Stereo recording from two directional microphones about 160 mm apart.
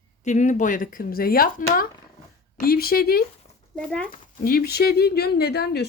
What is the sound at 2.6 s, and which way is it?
Speech, 70° left (ahead or behind).